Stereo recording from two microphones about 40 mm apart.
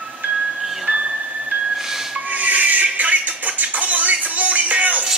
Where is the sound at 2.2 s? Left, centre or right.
Right.